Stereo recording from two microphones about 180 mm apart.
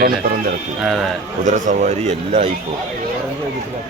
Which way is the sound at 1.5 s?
45° right (ahead or behind).